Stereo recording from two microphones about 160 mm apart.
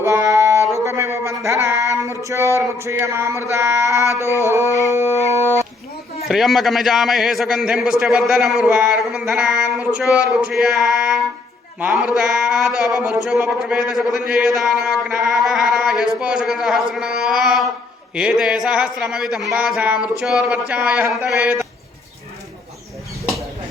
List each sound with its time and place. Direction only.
0.0 s music: 15° right (ahead or behind)
3.5 s singing: 15° right (ahead or behind)
4.4 s a sound: 20° right (ahead or behind)
5.3 s dog: 20° right (ahead or behind)
6.2 s a man's voice: centre (ahead or behind)
21.3 s a sound: 15° right (ahead or behind)